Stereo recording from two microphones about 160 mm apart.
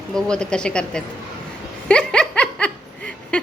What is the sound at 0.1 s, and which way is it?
Speech, 5° left (ahead or behind).